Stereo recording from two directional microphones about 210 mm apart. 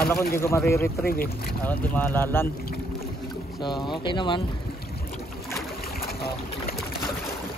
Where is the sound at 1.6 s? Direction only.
10° left (ahead or behind).